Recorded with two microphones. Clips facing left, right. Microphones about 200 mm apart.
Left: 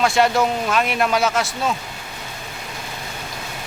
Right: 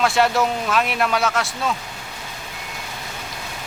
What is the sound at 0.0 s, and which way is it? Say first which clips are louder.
A man's voice: left 1 dB; centre (ahead or behind).